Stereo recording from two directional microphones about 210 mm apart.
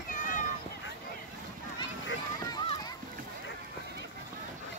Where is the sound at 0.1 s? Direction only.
35° left (ahead or behind).